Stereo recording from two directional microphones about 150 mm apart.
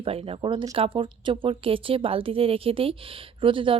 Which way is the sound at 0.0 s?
40° right (ahead or behind).